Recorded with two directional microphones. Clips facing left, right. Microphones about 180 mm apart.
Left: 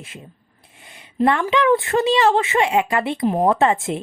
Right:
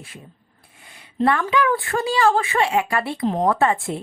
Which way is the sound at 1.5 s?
20° left (ahead or behind).